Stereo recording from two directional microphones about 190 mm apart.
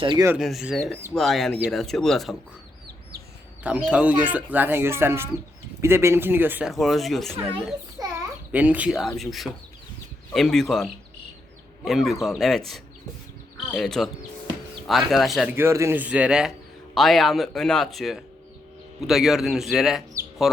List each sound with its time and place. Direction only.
0.0 s speech: 25° right (ahead or behind)
0.3 s speech: centre (ahead or behind)
3.8 s speech: 5° right (ahead or behind)
7.9 s a child's voice: 10° right (ahead or behind)
15.5 s speech: 15° right (ahead or behind)